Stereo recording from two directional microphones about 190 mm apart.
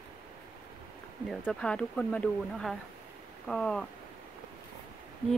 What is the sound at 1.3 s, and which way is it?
Speech, 5° left (ahead or behind).